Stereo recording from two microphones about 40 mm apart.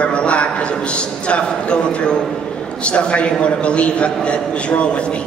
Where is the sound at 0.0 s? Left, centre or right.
Left.